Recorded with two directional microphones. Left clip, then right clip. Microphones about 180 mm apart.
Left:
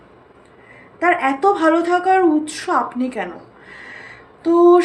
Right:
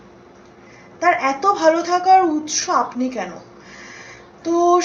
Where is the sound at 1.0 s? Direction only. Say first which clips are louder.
Left 1 dB; 35° left (ahead or behind).